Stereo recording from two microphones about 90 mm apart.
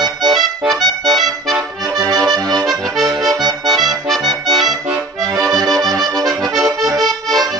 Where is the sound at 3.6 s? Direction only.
Centre (ahead or behind).